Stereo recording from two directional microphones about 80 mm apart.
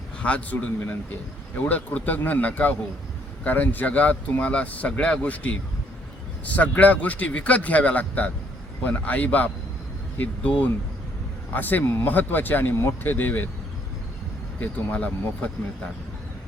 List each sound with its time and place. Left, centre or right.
0.2 s speech: centre
14.6 s speech: centre